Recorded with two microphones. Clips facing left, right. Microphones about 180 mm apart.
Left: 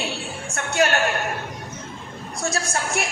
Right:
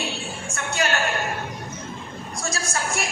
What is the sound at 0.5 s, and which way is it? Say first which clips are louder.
Speech: left 5 dB; 65° left (ahead or behind).